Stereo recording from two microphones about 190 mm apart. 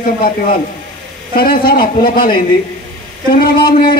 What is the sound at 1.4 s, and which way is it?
A man's voice, 50° left (ahead or behind).